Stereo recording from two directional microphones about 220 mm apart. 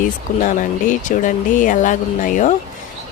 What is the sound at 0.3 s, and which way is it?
Speech, 35° left (ahead or behind).